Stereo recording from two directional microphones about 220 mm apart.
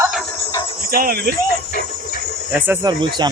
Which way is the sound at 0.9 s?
40° right (ahead or behind).